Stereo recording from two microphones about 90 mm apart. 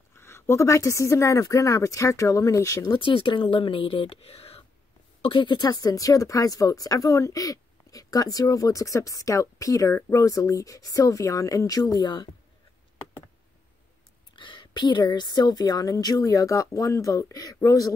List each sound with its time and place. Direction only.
0.1 s speech: 30° left (ahead or behind)
2.9 s speech: 65° left (ahead or behind); by 4.6 s 90° left
5.2 s speech: 60° left (ahead or behind); by 12.1 s 45° left (ahead or behind)
14.3 s a woman's voice: 65° left (ahead or behind); by 17.9 s 40° left (ahead or behind)